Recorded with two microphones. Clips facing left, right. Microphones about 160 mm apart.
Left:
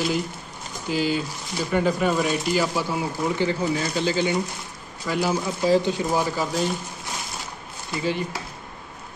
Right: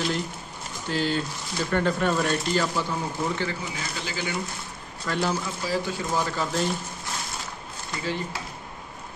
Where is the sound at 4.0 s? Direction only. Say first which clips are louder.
Left 8 dB; 25° left (ahead or behind).